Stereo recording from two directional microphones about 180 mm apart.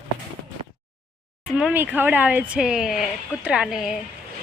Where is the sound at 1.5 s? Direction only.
5° right (ahead or behind).